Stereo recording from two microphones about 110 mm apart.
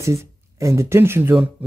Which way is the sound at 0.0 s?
25° right (ahead or behind).